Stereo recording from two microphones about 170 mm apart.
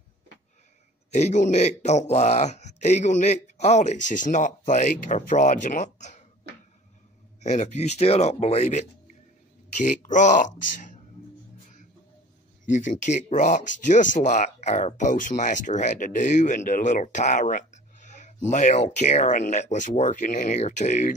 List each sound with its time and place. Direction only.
1.1 s speech: 45° left (ahead or behind)
7.4 s speech: 45° left (ahead or behind)
12.7 s speech: 45° left (ahead or behind)